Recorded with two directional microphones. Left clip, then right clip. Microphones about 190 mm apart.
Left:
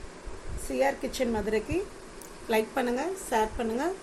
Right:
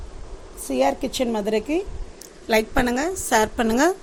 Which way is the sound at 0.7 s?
45° right (ahead or behind).